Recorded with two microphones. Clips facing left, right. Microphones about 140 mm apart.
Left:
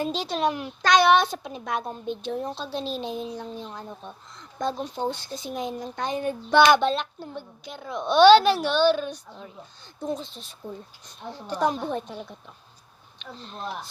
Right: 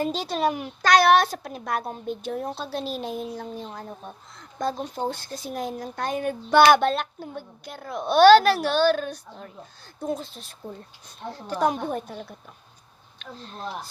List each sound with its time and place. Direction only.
0.1 s a child's voice: 45° right (ahead or behind)
0.3 s a woman's voice: 5° right (ahead or behind)